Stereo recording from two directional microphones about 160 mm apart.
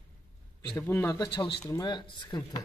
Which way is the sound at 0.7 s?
15° left (ahead or behind).